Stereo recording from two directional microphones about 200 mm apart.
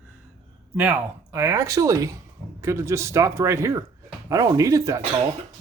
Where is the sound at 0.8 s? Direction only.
10° right (ahead or behind).